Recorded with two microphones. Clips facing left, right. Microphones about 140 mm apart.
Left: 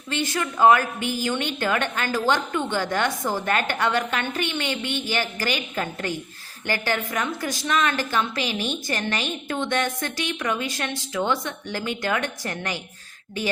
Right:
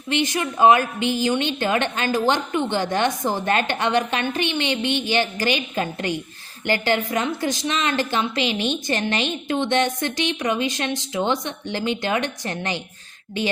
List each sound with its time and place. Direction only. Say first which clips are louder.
0.1 s a woman's voice: right 4 dB; 20° right (ahead or behind)